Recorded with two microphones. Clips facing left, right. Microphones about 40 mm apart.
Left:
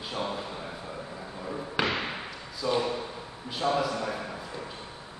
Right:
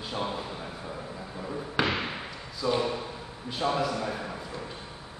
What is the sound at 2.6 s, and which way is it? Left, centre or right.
A man's voice, centre.